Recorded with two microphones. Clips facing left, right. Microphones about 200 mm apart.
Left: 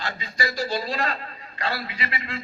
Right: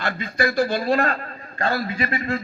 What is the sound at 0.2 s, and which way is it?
A man's voice, 55° right (ahead or behind).